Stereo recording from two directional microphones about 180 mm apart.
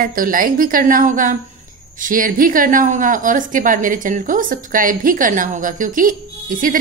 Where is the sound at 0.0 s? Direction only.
50° right (ahead or behind).